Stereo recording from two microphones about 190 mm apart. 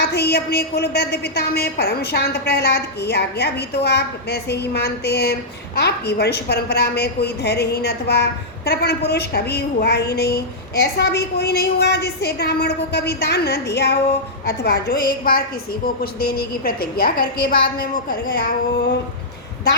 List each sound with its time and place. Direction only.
0.0 s a woman's voice: 60° left (ahead or behind)